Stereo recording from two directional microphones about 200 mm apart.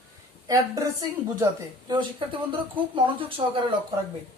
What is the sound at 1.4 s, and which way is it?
Speech, 20° right (ahead or behind).